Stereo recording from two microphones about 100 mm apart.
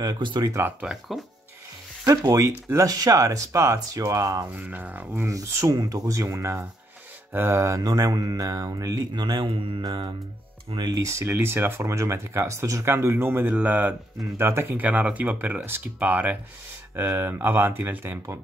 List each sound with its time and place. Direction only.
0.0 s speech: 50° right (ahead or behind)
0.5 s speech: 20° right (ahead or behind)
0.8 s speech: centre (ahead or behind)
2.0 s speech: 35° right (ahead or behind)
4.5 s speech: 15° right (ahead or behind); by 9.2 s 35° right (ahead or behind)
9.2 s speech: 50° right (ahead or behind)
9.8 s speech: 50° right (ahead or behind)
10.9 s speech: 30° right (ahead or behind)